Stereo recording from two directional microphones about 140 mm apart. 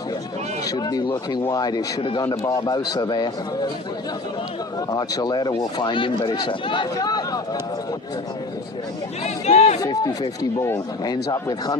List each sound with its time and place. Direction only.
0.7 s a man's voice: 30° left (ahead or behind)
2.0 s speech: 40° left (ahead or behind)
2.2 s speech: 15° left (ahead or behind)
2.5 s a man's voice: 30° left (ahead or behind)
4.9 s speech: 25° left (ahead or behind)
9.2 s speech: 50° left (ahead or behind)
9.8 s a man's voice: 25° left (ahead or behind)